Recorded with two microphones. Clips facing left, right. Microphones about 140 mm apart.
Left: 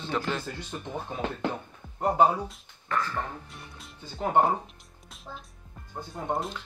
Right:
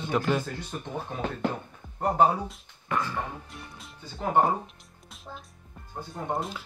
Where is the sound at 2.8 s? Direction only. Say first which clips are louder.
Even; 15° right (ahead or behind).